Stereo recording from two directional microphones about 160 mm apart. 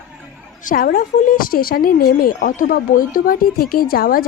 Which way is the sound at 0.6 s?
65° left (ahead or behind).